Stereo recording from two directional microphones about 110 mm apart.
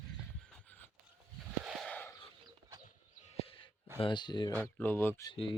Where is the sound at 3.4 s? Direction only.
55° left (ahead or behind).